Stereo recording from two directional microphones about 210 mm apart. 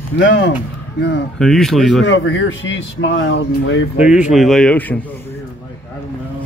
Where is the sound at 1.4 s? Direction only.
Centre (ahead or behind).